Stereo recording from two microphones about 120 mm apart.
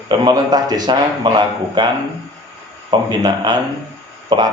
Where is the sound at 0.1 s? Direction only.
35° right (ahead or behind).